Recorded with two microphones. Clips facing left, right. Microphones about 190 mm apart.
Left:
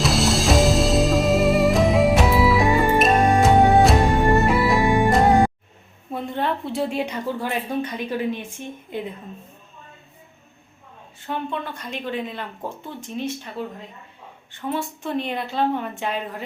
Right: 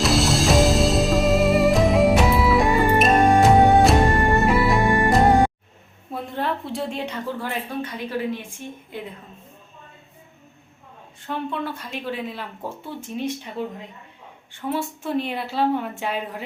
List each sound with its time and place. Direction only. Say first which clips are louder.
0.0 s music: right 1 dB; centre (ahead or behind)
6.1 s a sound: left 2 dB; centre (ahead or behind)
6.9 s a woman's voice: left 3 dB; 15° left (ahead or behind)
11.3 s a woman's voice: right 1 dB; 5° right (ahead or behind)
14.5 s a woman's voice: right 1 dB; 10° right (ahead or behind)